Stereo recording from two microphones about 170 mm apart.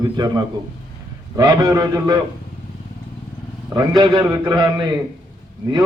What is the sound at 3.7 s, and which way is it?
A man's voice, 20° right (ahead or behind).